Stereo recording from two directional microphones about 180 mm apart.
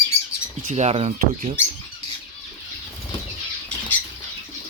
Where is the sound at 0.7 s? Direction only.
35° right (ahead or behind).